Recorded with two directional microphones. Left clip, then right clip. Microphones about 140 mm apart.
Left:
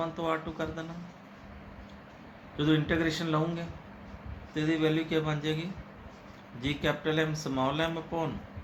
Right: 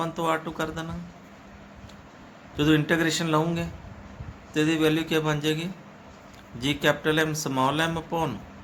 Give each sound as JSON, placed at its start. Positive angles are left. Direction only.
{"t": 0.0, "sound": "speech", "side_deg": -70}
{"t": 2.6, "sound": "speech", "side_deg": -70}